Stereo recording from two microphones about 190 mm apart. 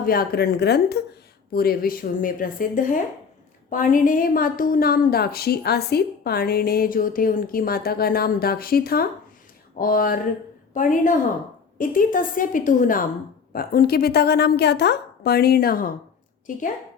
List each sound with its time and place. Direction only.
0.0 s a woman's voice: 50° left (ahead or behind)